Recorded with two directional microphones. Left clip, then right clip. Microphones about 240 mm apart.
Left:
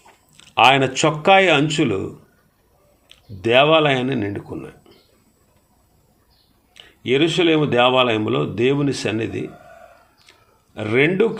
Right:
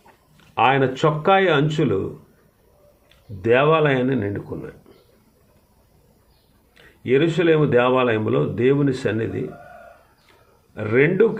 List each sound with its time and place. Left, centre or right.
0.5 s speech: left
3.4 s speech: left
7.1 s speech: left
10.8 s speech: left